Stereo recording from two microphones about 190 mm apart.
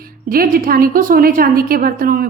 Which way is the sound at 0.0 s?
50° right (ahead or behind).